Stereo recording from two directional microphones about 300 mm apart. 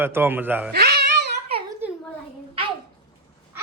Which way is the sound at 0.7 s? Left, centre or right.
Right.